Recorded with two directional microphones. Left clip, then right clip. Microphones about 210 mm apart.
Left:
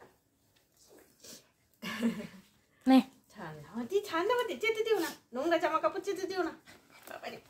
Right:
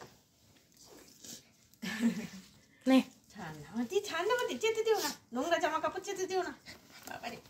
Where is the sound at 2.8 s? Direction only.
5° left (ahead or behind).